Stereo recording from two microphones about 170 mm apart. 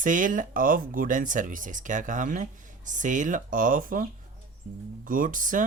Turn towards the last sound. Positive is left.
turn(degrees=-50)  # may be behind; listen again after turning